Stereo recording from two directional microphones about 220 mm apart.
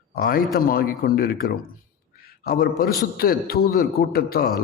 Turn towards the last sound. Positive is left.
turn(degrees=45)  # may be behind; listen again after turning